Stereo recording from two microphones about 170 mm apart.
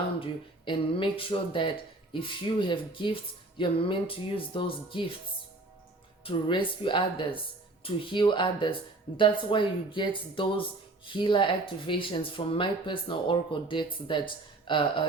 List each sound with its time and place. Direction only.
0.2 s speech: 30° left (ahead or behind)
6.2 s speech: 30° left (ahead or behind)